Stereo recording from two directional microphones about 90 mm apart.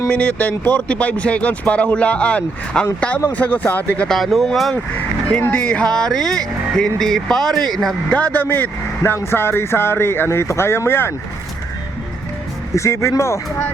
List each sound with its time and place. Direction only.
0.1 s speech: 20° left (ahead or behind)
4.2 s speech: centre (ahead or behind)
5.3 s speech: 15° left (ahead or behind)
8.1 s speech: 20° left (ahead or behind)
12.7 s speech: 30° left (ahead or behind)